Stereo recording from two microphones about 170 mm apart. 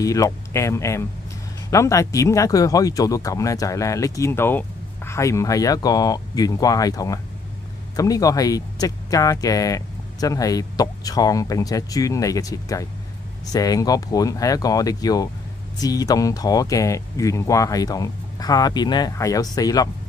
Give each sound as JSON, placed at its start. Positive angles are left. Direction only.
{"t": 0.0, "sound": "speech", "side_deg": 20}